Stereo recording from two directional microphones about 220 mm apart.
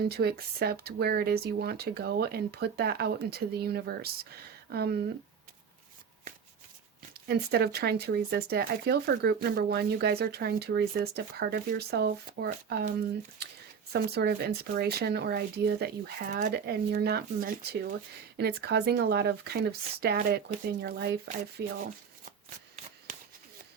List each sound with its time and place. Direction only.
0.1 s speech: 45° right (ahead or behind)
7.3 s speech: 45° right (ahead or behind)
13.9 s speech: 45° right (ahead or behind)